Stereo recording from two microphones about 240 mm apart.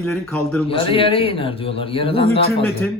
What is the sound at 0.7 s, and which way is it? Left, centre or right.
Speech, left.